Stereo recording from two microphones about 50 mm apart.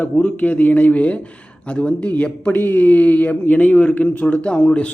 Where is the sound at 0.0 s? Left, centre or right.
Left.